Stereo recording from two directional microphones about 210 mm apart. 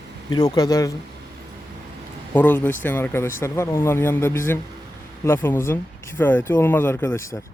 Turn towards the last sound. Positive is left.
turn(degrees=15)  # may be behind; listen again after turning